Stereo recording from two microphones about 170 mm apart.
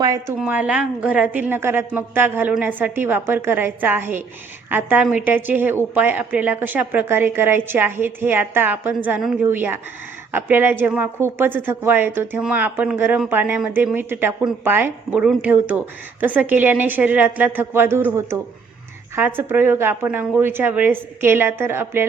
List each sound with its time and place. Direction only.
0.0 s a woman's voice: 20° right (ahead or behind)
0.3 s a woman's voice: 5° right (ahead or behind)